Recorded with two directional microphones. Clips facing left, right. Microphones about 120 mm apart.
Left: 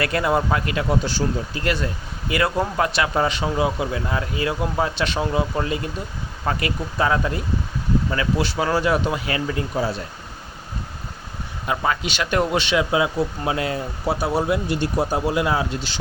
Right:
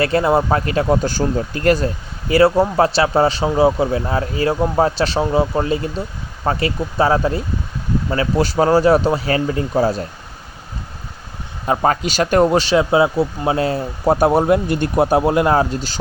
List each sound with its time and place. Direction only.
0.0 s speech: 30° right (ahead or behind)
11.6 s speech: 40° right (ahead or behind)
14.1 s speech: 50° right (ahead or behind)